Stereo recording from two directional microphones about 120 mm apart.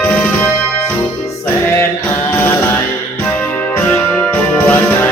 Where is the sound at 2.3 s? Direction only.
15° left (ahead or behind).